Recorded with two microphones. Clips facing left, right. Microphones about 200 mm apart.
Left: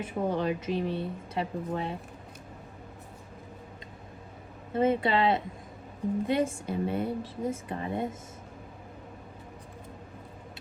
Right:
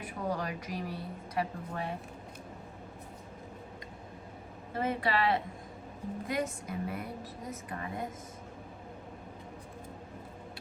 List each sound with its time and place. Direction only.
0.0 s a woman's voice: 25° left (ahead or behind)
4.7 s a woman's voice: 25° left (ahead or behind)